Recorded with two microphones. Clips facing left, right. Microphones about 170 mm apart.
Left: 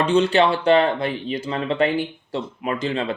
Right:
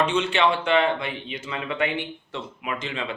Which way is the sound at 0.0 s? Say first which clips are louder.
Left 5 dB; 35° left (ahead or behind).